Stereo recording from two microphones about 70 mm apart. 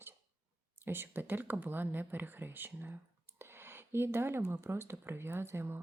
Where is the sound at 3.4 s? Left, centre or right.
Right.